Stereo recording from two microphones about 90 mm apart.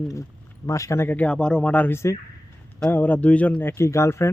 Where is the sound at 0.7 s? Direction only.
35° left (ahead or behind).